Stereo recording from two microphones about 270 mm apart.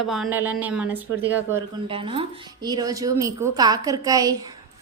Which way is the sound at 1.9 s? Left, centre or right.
Centre.